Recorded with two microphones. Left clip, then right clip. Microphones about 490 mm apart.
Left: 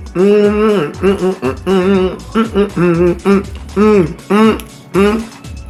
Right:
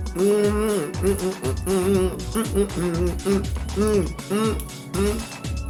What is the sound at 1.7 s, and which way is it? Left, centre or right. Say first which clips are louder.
Music: left 9 dB; right.